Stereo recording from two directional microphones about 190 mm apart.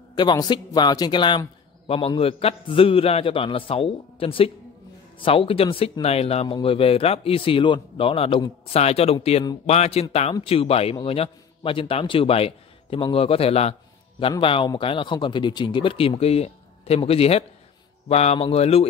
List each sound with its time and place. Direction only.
0.1 s a man's voice: 20° left (ahead or behind)